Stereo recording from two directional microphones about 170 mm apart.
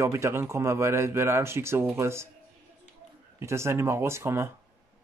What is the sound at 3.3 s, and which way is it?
Speech, 15° right (ahead or behind).